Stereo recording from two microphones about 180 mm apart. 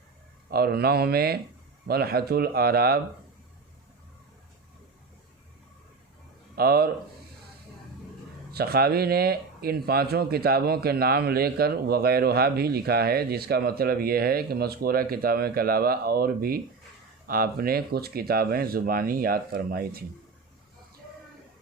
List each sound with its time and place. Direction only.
0.5 s speech: 60° right (ahead or behind)
6.6 s speech: 60° right (ahead or behind)
8.5 s speech: 60° right (ahead or behind)